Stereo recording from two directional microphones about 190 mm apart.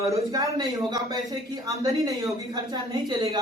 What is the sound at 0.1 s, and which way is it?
Speech, 20° right (ahead or behind).